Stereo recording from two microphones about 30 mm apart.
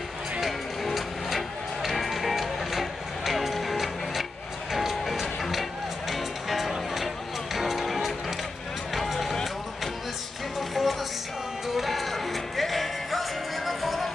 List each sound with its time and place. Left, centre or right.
0.5 s music: centre
10.7 s music: centre